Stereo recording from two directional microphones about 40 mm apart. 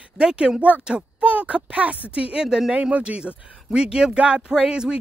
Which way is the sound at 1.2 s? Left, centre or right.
Right.